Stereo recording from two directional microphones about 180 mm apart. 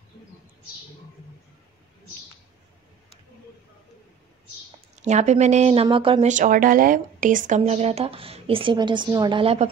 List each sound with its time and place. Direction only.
4.9 s speech: 40° right (ahead or behind)
6.2 s speech: 45° right (ahead or behind)